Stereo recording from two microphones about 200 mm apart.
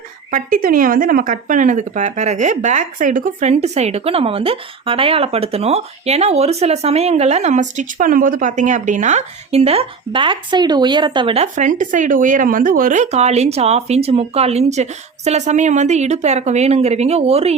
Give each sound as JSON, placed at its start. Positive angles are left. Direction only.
{"t": 0.3, "sound": "speech", "side_deg": -45}
{"t": 11.5, "sound": "speech", "side_deg": -40}